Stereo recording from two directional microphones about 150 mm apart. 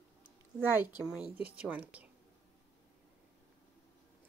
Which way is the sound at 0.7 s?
10° right (ahead or behind).